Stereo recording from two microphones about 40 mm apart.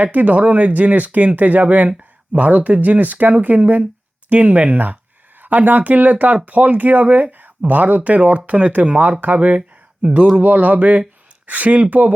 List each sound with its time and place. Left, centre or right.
0.0 s speech: right
9.6 s speech: right
10.3 s speech: right